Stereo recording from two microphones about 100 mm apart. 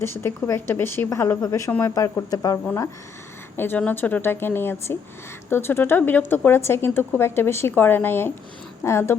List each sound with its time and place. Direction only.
0.0 s a woman's voice: 25° left (ahead or behind)
3.6 s a woman's voice: 20° left (ahead or behind)